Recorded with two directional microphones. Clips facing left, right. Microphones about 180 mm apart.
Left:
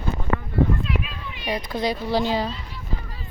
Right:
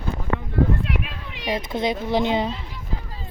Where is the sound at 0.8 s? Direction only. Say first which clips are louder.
Even; 65° right (ahead or behind).